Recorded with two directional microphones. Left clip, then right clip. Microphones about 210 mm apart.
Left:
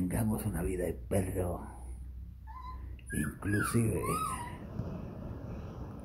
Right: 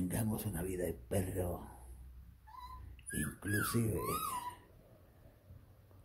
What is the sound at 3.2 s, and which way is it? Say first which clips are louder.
Speech: left 4 dB; 10° right (ahead or behind).